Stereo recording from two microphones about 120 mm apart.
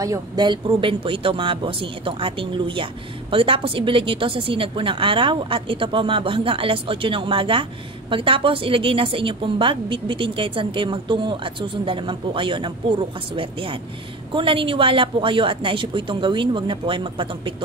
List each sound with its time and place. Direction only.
0.0 s speech: 35° right (ahead or behind)